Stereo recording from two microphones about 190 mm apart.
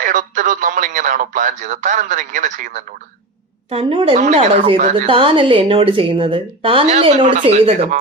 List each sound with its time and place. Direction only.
0.0 s speech: 45° right (ahead or behind)
3.7 s speech: 30° right (ahead or behind)